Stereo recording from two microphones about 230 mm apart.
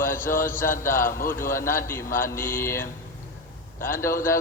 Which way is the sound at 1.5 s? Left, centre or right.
Centre.